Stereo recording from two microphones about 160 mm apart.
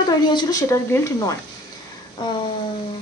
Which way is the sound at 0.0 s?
30° left (ahead or behind).